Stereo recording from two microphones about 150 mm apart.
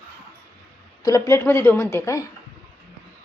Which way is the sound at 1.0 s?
25° left (ahead or behind).